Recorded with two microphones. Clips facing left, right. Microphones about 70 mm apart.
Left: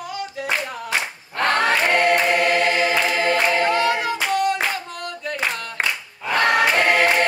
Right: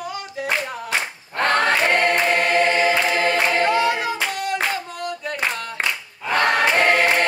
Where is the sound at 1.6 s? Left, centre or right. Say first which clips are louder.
Even; centre.